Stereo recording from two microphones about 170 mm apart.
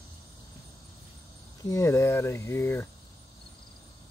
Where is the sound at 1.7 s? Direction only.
15° left (ahead or behind).